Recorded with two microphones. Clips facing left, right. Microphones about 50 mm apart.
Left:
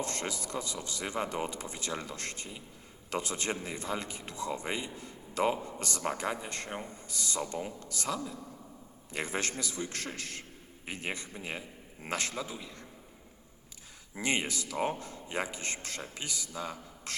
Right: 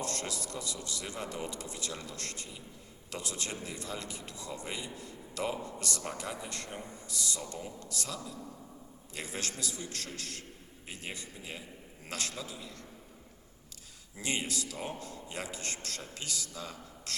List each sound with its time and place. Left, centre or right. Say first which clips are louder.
0.0 s a man's voice: left 2 dB; left
14.2 s a man's voice: left 3 dB; left